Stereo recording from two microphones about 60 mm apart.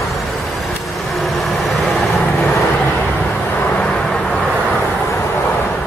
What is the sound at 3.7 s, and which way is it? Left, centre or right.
Vehicle, centre.